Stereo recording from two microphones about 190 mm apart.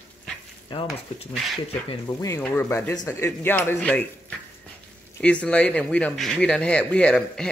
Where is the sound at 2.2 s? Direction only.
10° left (ahead or behind).